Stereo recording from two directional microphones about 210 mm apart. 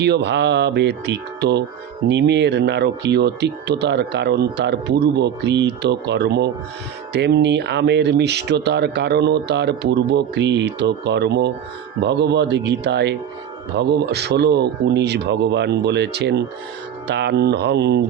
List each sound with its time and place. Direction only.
0.0 s speech: 55° right (ahead or behind)